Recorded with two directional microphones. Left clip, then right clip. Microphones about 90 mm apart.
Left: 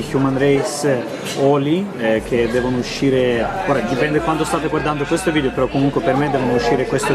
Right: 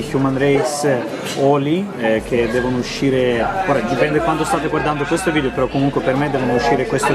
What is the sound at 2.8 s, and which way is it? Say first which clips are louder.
Speech: even; centre (ahead or behind).